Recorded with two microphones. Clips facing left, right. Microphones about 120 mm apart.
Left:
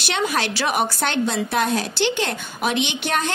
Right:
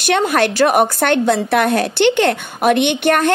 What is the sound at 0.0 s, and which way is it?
A woman's voice, 55° right (ahead or behind).